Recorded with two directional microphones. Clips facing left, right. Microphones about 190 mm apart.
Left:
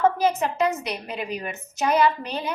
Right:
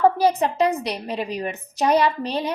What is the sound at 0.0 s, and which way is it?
A woman's voice, 35° right (ahead or behind).